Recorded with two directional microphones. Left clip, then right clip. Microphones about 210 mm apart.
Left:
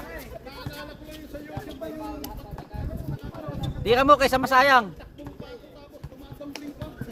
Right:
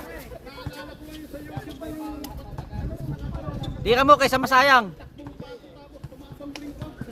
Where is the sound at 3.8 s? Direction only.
30° right (ahead or behind).